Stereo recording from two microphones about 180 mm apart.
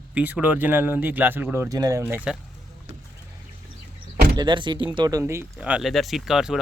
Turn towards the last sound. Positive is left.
turn(degrees=0)  # may be behind; listen again after turning